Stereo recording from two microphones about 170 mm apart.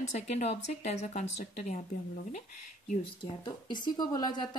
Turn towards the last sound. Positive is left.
turn(degrees=25)  # may be behind; listen again after turning